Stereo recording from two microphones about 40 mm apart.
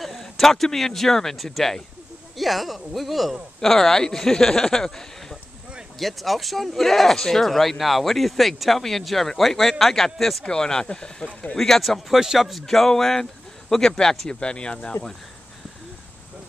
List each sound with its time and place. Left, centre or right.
0.0 s speech: centre
5.9 s speech: centre
10.4 s speech: centre
11.5 s speech: centre
12.2 s speech: centre
12.6 s speech: centre; by 15.0 s left